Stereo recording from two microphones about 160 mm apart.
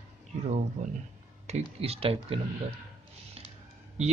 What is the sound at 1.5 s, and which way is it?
Speech, 45° right (ahead or behind).